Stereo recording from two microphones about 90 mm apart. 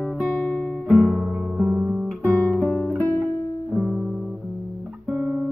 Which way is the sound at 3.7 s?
Centre (ahead or behind).